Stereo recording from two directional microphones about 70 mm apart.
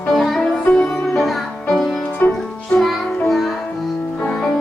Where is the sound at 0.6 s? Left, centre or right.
Left.